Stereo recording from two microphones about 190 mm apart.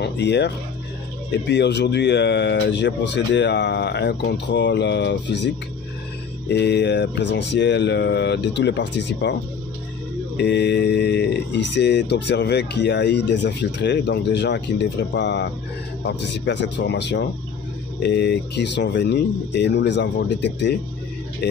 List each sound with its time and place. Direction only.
0.0 s speech: 65° left (ahead or behind)
1.5 s speech: 65° left (ahead or behind)
6.5 s speech: 60° left (ahead or behind)